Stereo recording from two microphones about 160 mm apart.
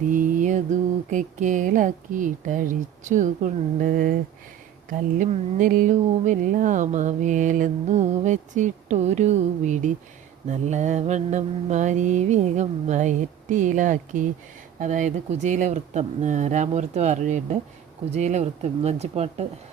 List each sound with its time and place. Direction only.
0.1 s mantra: 55° right (ahead or behind)
1.1 s speech: 50° right (ahead or behind)